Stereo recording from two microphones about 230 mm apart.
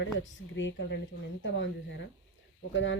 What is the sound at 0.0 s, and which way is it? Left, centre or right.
Speech, left.